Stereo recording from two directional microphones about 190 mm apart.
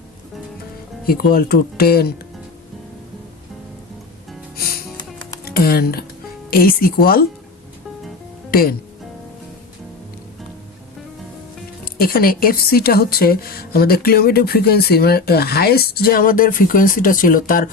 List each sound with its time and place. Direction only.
1.0 s speech: 50° left (ahead or behind)
5.5 s speech: 55° left (ahead or behind)
8.4 s speech: 50° left (ahead or behind)
11.9 s speech: 50° left (ahead or behind)